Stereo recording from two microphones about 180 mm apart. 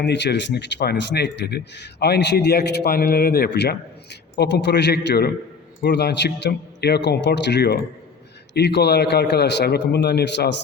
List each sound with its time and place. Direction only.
0.0 s speech: 70° left (ahead or behind)